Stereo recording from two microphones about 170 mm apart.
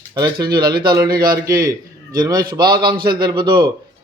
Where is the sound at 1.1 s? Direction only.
60° right (ahead or behind).